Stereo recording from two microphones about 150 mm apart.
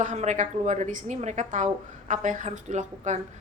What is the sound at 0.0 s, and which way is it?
A woman's voice, 55° right (ahead or behind).